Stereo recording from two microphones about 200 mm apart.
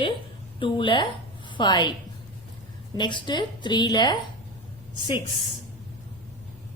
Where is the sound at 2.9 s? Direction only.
20° left (ahead or behind).